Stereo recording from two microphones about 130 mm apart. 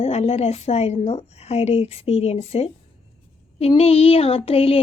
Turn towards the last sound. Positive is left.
turn(degrees=50)  # may be behind; listen again after turning